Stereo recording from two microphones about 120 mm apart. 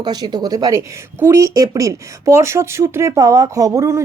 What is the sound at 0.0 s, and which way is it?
A woman's voice, 35° right (ahead or behind).